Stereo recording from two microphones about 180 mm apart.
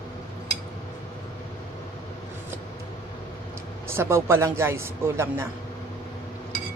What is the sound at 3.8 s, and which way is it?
A woman's voice, 15° right (ahead or behind).